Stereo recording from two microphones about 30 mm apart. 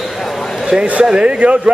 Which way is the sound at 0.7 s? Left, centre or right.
Right.